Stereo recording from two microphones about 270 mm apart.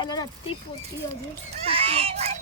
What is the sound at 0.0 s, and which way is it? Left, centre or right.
Speech, centre.